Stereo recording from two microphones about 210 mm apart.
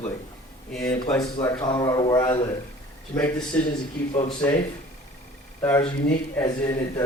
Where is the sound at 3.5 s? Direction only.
5° left (ahead or behind).